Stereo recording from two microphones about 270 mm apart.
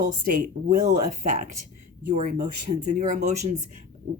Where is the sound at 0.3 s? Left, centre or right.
Right.